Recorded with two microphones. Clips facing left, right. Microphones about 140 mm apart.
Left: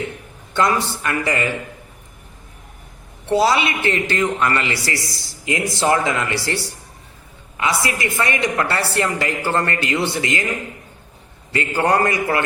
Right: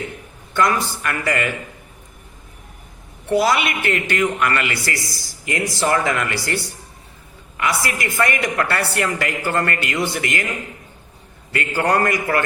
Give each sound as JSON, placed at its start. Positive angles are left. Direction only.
{"t": 0.5, "sound": "a woman's voice", "side_deg": 25}
{"t": 3.2, "sound": "a woman's voice", "side_deg": 25}
{"t": 11.5, "sound": "a woman's voice", "side_deg": 20}